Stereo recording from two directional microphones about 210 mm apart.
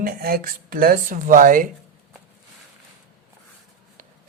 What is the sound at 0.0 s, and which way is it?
Speech, 45° right (ahead or behind).